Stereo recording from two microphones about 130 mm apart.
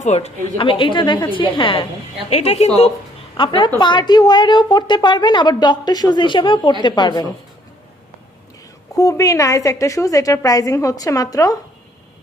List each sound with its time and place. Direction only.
0.0 s a woman's voice: 60° left (ahead or behind)
0.6 s a woman's voice: 40° left (ahead or behind)
2.3 s a woman's voice: 55° left (ahead or behind)
3.3 s a woman's voice: 40° left (ahead or behind)
9.0 s a woman's voice: 25° left (ahead or behind)